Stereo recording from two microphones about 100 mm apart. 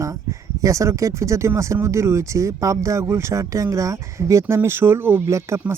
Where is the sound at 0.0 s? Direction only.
35° right (ahead or behind).